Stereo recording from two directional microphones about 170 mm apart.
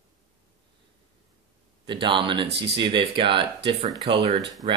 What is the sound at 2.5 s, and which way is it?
Speech, 85° right.